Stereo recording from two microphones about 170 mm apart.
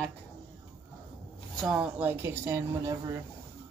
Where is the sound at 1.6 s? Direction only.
5° right (ahead or behind).